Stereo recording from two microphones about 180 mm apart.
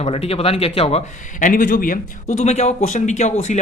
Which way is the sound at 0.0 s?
35° left (ahead or behind).